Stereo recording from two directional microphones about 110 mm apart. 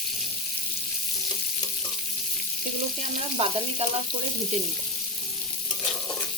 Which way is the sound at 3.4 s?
65° right (ahead or behind).